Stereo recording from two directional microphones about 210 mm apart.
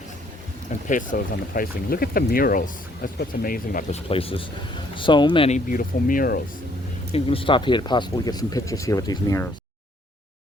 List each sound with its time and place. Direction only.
0.9 s speech: 40° left (ahead or behind)
4.1 s speech: 25° left (ahead or behind); by 6.4 s 40° left (ahead or behind)
7.1 s speech: 25° left (ahead or behind)